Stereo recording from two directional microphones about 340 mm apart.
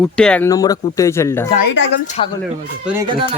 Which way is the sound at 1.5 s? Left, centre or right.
Left.